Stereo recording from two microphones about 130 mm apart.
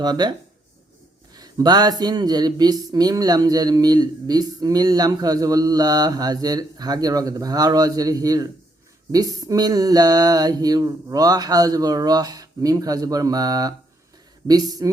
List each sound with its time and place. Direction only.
0.0 s speech: 35° right (ahead or behind)